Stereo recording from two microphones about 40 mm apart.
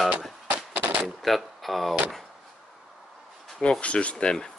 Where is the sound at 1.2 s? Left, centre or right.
Centre.